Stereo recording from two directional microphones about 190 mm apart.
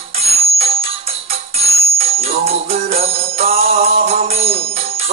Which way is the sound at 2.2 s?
35° right (ahead or behind).